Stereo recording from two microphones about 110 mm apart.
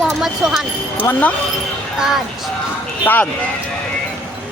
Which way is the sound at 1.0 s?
15° left (ahead or behind).